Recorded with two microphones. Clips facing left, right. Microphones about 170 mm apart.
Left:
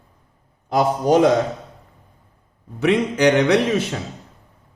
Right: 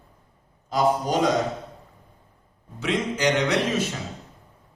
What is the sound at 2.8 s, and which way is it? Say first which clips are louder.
Speech: left 8 dB; 60° left (ahead or behind).